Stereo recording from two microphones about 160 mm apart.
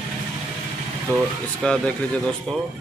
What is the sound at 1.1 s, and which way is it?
Speech, 10° left (ahead or behind).